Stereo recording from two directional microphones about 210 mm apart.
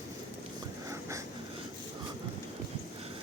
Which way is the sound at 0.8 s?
15° right (ahead or behind).